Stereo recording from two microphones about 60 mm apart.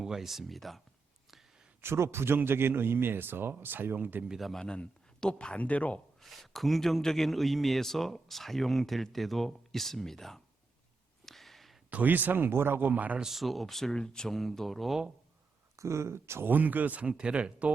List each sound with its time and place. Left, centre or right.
0.0 s a man's voice: centre
1.8 s a man's voice: right
4.4 s a man's voice: centre
4.6 s speech: centre
6.1 s a man's voice: centre
11.3 s a sound: centre
11.9 s speech: right
13.1 s a man's voice: centre
15.7 s speech: right
16.5 s speech: right